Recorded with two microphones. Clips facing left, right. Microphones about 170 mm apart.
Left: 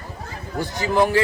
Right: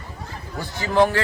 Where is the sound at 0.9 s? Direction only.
10° left (ahead or behind).